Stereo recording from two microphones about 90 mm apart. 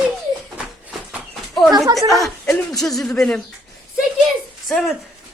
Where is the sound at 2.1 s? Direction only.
Centre (ahead or behind).